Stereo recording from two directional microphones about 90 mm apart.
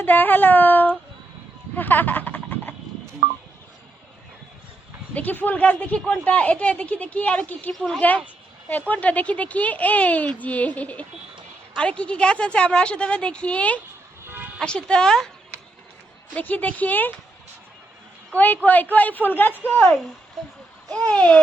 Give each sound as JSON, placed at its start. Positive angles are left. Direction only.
{"t": 0.0, "sound": "speech", "side_deg": 20}
{"t": 1.7, "sound": "a sound", "side_deg": 20}
{"t": 5.1, "sound": "speech", "side_deg": 20}
{"t": 14.3, "sound": "music", "side_deg": -20}
{"t": 14.6, "sound": "speech", "side_deg": 10}
{"t": 16.3, "sound": "speech", "side_deg": 20}
{"t": 18.3, "sound": "speech", "side_deg": 20}
{"t": 21.1, "sound": "speech", "side_deg": 15}